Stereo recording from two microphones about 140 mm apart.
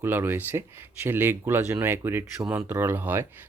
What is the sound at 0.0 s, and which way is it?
Speech, 15° right (ahead or behind).